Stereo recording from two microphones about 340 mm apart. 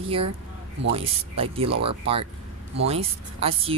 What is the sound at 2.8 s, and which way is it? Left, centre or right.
Speech, centre.